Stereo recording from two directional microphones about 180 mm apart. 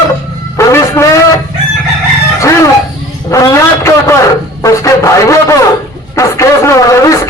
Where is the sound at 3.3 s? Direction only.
15° left (ahead or behind).